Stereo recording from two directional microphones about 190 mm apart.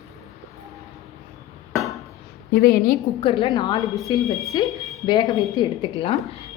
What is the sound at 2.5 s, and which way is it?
Speech, 55° left (ahead or behind).